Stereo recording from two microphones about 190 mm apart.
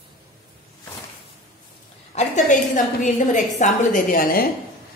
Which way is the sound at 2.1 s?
40° left (ahead or behind).